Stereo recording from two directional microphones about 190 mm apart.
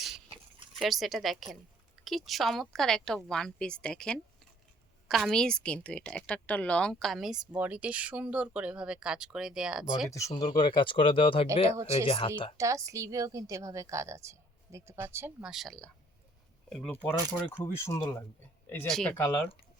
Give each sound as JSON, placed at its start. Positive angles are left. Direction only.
{"t": 0.8, "sound": "a woman's voice", "side_deg": 0}
{"t": 10.1, "sound": "speech", "side_deg": 15}
{"t": 11.7, "sound": "a woman's voice", "side_deg": -15}
{"t": 12.0, "sound": "speech", "side_deg": 30}
{"t": 12.5, "sound": "a woman's voice", "side_deg": -15}
{"t": 17.0, "sound": "a woman's voice", "side_deg": 10}